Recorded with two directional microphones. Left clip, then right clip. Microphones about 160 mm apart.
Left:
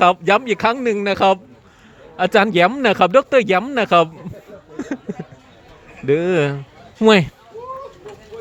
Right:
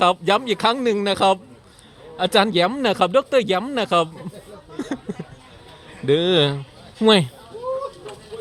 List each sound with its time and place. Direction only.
0.0 s speech: 10° left (ahead or behind)
4.8 s a sound: 10° left (ahead or behind)
6.1 s speech: 10° left (ahead or behind)